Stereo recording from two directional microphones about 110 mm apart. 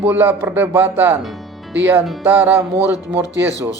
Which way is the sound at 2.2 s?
15° right (ahead or behind).